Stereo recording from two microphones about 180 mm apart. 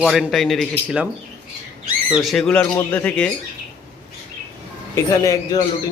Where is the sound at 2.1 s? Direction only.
Centre (ahead or behind).